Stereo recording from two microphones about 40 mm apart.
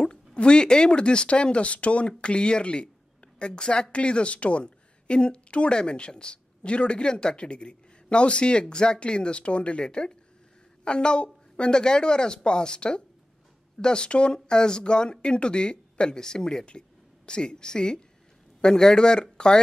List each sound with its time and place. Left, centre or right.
0.0 s a woman's voice: left